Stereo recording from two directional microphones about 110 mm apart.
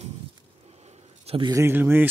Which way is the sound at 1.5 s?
20° right (ahead or behind).